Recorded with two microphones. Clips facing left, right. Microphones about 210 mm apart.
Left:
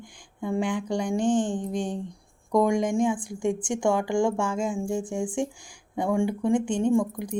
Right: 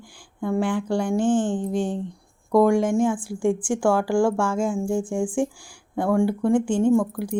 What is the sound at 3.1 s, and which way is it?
Speech, 5° right (ahead or behind).